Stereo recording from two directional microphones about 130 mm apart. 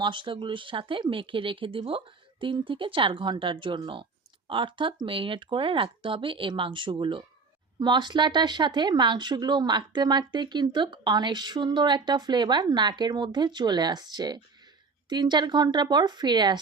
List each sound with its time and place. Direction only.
0.0 s speech: 40° right (ahead or behind)